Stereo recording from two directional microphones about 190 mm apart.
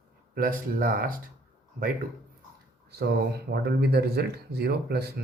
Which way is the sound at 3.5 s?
60° right (ahead or behind).